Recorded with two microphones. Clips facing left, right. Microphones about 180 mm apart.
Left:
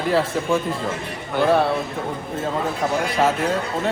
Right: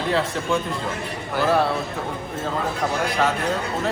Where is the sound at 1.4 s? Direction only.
Centre (ahead or behind).